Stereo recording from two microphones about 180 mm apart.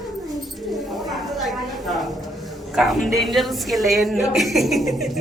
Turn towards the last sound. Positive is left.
turn(degrees=0)  # may be behind; listen again after turning